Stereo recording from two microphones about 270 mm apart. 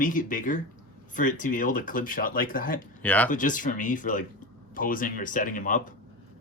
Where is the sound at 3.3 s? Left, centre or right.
Left.